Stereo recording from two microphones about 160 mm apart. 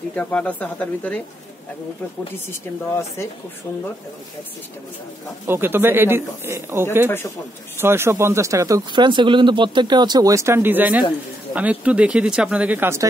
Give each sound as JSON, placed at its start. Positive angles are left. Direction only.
{"t": 0.1, "sound": "speech", "side_deg": 10}
{"t": 5.5, "sound": "speech", "side_deg": -15}
{"t": 7.1, "sound": "speech", "side_deg": 15}
{"t": 7.8, "sound": "speech", "side_deg": -15}